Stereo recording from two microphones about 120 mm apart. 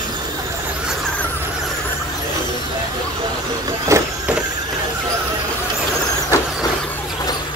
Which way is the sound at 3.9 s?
25° right (ahead or behind).